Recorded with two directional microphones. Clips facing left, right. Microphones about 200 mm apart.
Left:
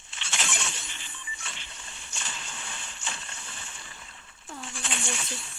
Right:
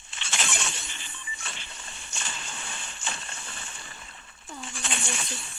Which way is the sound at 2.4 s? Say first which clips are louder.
Right 2 dB; 45° right (ahead or behind).